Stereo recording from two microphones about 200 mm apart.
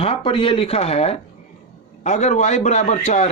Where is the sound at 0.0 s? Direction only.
25° left (ahead or behind).